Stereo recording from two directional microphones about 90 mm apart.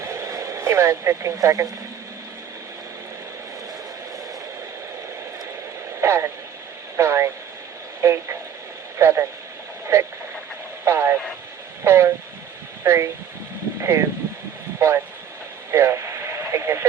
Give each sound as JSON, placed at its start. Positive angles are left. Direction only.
{"t": 0.0, "sound": "radio", "side_deg": -30}
{"t": 6.0, "sound": "a sound", "side_deg": -30}
{"t": 6.9, "sound": "vehicle", "side_deg": -30}
{"t": 8.0, "sound": "radio", "side_deg": -30}
{"t": 9.0, "sound": "a sound", "side_deg": -30}
{"t": 10.8, "sound": "vehicle", "side_deg": -30}
{"t": 11.9, "sound": "a sound", "side_deg": -30}
{"t": 14.8, "sound": "vehicle", "side_deg": -30}
{"t": 15.7, "sound": "radio", "side_deg": -30}